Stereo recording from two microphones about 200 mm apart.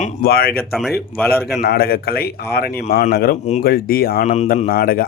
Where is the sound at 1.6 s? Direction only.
50° left (ahead or behind).